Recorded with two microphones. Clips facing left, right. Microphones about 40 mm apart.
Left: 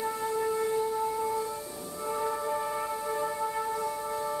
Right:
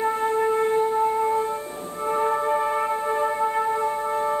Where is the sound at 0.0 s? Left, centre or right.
Right.